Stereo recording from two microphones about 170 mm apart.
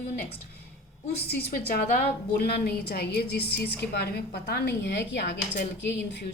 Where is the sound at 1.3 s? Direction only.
70° left (ahead or behind).